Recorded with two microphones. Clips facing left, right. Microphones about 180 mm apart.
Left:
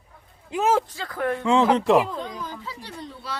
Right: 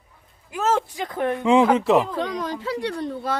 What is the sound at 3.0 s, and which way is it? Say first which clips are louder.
Speech: right 9 dB; 55° right (ahead or behind).